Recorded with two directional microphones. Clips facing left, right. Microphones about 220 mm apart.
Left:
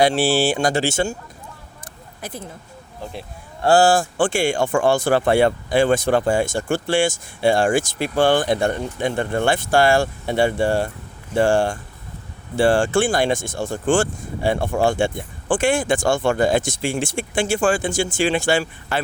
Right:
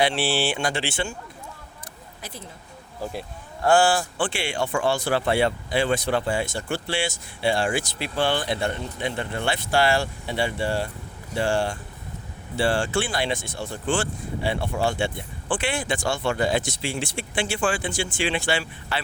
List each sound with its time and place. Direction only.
0.0 s speech: 40° left (ahead or behind)
1.8 s a sound: 50° left (ahead or behind)
3.0 s speech: centre (ahead or behind)
3.6 s speech: 35° left (ahead or behind)